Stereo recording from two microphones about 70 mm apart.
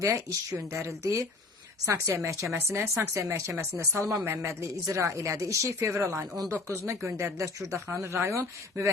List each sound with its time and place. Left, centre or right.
0.0 s speech: right
3.1 s speech: right
4.2 s speech: right
4.6 s speech: right